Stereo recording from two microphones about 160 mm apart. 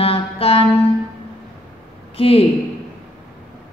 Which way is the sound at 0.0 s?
35° left (ahead or behind).